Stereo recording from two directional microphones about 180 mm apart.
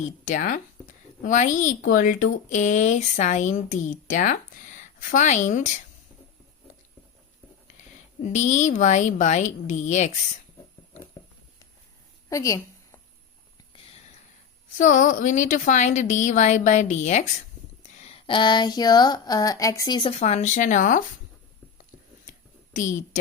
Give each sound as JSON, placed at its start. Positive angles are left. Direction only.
{"t": 0.0, "sound": "speech", "side_deg": 45}
{"t": 7.8, "sound": "speech", "side_deg": 40}
{"t": 12.3, "sound": "a sound", "side_deg": 15}
{"t": 14.8, "sound": "speech", "side_deg": 45}
{"t": 22.7, "sound": "speech", "side_deg": 45}